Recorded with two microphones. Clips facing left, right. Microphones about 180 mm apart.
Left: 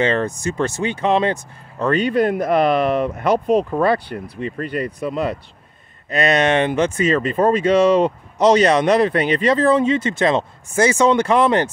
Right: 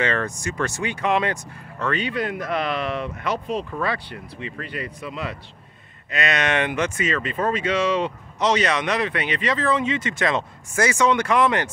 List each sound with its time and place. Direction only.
0.0 s speech: 25° left (ahead or behind)
1.9 s speech: 45° left (ahead or behind)